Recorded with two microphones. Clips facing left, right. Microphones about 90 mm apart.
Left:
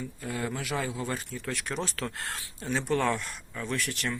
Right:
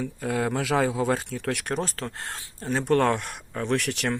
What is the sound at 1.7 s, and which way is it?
Speech, 45° right (ahead or behind).